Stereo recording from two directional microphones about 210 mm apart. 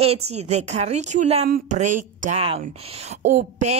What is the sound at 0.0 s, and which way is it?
A woman's voice, 30° right (ahead or behind).